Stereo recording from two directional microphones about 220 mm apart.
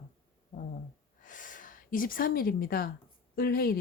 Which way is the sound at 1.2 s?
35° left (ahead or behind).